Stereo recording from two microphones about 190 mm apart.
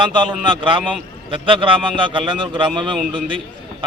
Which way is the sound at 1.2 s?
25° right (ahead or behind).